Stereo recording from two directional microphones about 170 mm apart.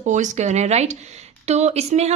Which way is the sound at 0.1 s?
45° right (ahead or behind).